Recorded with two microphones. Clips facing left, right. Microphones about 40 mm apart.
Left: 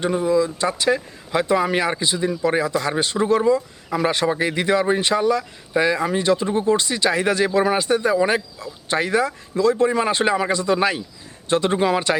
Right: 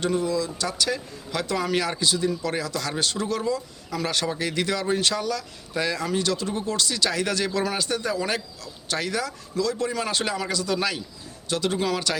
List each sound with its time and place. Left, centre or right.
0.0 s speech: left